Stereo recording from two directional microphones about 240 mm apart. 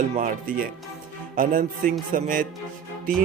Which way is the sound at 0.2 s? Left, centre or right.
Right.